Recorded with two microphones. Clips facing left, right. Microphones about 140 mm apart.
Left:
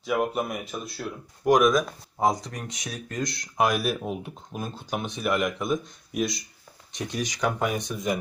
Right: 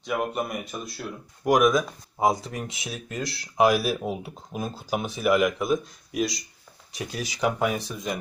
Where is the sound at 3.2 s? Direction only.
30° right (ahead or behind).